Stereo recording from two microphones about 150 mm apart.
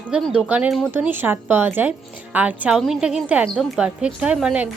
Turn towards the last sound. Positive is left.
turn(degrees=-5)  # may be behind; listen again after turning